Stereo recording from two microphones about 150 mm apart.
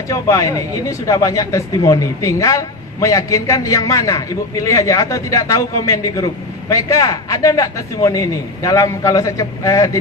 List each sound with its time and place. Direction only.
0.1 s speech: 20° left (ahead or behind)